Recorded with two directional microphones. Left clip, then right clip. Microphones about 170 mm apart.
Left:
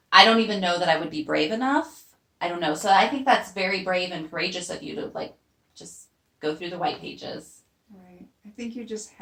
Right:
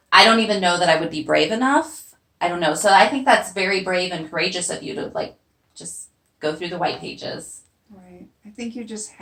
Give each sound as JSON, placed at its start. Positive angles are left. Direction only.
{"t": 0.1, "sound": "a woman's voice", "side_deg": -15}
{"t": 6.4, "sound": "a woman's voice", "side_deg": -15}
{"t": 8.5, "sound": "speech", "side_deg": 15}